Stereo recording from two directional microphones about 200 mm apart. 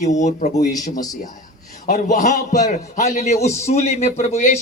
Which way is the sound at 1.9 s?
40° left (ahead or behind).